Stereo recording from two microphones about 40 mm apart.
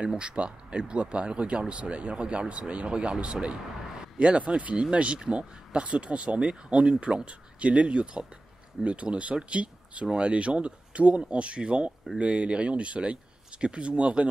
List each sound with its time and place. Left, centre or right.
0.4 s speech: right